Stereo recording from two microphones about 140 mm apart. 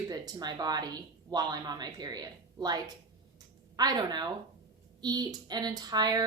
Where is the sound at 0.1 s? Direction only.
30° right (ahead or behind).